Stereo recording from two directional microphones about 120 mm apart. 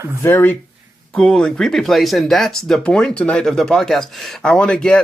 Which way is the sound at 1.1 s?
5° left (ahead or behind).